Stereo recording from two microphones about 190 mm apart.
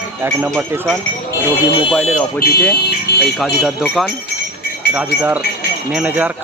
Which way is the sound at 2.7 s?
60° left (ahead or behind).